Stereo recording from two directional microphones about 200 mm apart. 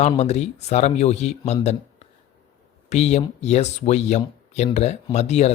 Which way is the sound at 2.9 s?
35° left (ahead or behind).